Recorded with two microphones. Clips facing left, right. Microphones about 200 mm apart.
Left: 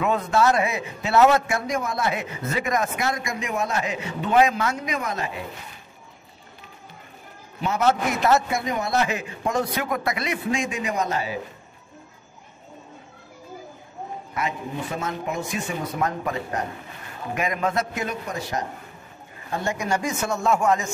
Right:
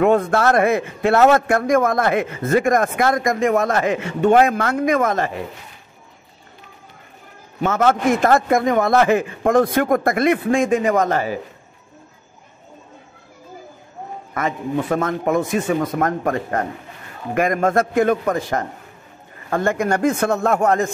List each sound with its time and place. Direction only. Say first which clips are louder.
0.0 s a man's voice: right 5 dB; 50° right (ahead or behind)
7.6 s a man's voice: right 5 dB; 50° right (ahead or behind)
14.3 s a man's voice: right 7 dB; 50° right (ahead or behind)